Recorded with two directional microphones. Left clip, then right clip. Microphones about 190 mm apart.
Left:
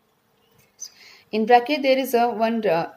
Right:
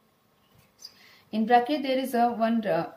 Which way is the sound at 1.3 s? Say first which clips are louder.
Left 5 dB; 25° left (ahead or behind).